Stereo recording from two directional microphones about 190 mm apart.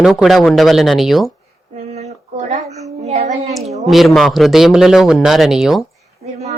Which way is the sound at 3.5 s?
Centre (ahead or behind).